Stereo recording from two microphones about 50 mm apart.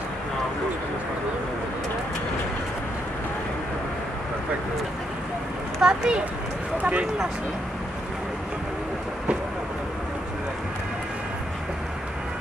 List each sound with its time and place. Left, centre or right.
5.8 s speech: centre
6.8 s speech: right